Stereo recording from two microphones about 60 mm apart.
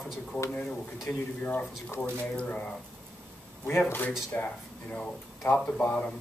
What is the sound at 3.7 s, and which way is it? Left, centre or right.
Speech, left.